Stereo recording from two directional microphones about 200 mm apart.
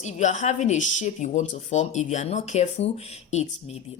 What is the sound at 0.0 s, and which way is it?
Speech, 35° left (ahead or behind).